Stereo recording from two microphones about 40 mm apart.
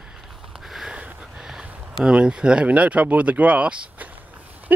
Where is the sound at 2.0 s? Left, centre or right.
Right.